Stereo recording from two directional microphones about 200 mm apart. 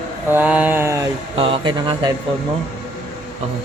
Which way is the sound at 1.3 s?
25° right (ahead or behind).